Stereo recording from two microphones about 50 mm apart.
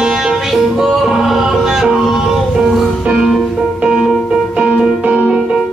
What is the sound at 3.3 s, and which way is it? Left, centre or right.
Music, centre.